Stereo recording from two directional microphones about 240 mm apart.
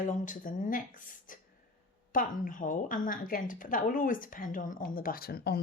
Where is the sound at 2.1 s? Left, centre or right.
Left.